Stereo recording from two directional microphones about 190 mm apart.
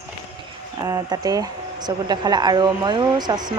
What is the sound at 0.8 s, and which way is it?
Speech, 20° right (ahead or behind).